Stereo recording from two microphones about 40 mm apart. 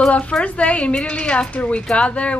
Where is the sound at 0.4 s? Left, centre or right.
Left.